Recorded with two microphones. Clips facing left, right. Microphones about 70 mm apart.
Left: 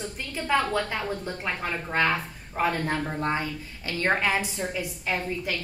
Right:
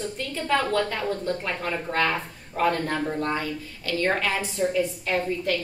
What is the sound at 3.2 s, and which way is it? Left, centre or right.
A woman's voice, left.